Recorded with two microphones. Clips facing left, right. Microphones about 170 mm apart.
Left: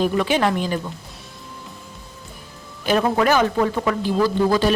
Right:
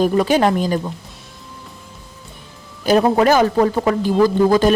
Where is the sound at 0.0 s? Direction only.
40° right (ahead or behind).